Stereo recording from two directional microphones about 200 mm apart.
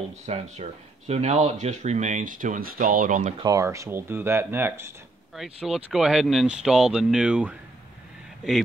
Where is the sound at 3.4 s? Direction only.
15° right (ahead or behind).